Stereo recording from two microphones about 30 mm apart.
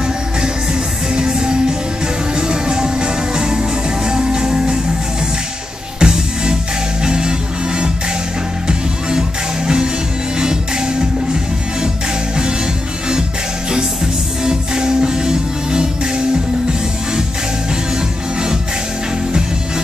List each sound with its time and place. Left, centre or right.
1.1 s music: right
5.9 s music: right
10.4 s music: right
14.4 s music: right